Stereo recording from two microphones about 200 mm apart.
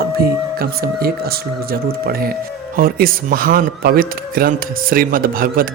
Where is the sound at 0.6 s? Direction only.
50° right (ahead or behind).